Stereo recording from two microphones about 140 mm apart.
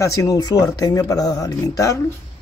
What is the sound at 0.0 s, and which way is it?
Speech, 20° left (ahead or behind).